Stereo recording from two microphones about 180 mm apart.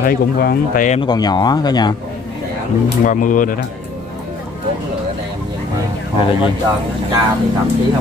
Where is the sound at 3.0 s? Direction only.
45° left (ahead or behind).